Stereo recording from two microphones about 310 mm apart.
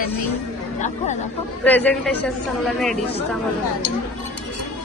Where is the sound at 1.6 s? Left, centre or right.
Centre.